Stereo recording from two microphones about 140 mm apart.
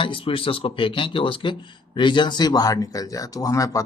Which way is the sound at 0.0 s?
40° left (ahead or behind).